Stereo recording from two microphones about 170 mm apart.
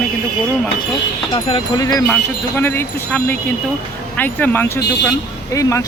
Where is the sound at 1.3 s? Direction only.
25° left (ahead or behind).